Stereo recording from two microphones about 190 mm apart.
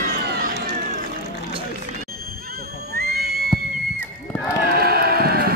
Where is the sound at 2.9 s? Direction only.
55° right (ahead or behind).